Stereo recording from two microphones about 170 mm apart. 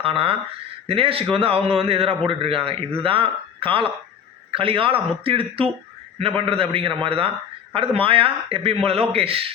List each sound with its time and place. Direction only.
0.0 s a man's voice: 35° right (ahead or behind)